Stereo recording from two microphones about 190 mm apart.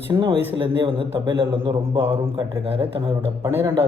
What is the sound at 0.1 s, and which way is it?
Speech, 25° right (ahead or behind).